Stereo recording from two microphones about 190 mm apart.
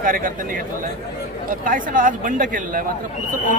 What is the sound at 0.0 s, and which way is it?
Speech, 45° right (ahead or behind).